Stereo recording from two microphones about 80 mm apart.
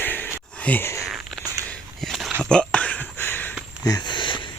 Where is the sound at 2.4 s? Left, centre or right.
Centre.